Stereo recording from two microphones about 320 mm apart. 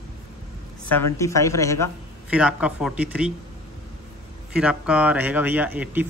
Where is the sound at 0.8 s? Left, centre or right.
Centre.